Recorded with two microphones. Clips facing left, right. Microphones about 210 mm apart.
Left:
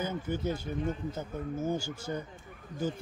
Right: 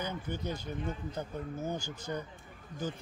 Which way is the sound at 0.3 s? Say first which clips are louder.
Left 4 dB; 10° left (ahead or behind).